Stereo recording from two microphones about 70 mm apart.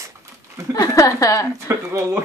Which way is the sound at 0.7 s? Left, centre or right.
Left.